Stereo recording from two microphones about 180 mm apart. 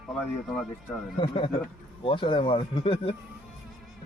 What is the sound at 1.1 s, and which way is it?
Speech, 25° left (ahead or behind).